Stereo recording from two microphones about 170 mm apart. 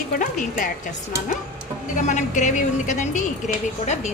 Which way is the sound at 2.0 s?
45° left (ahead or behind).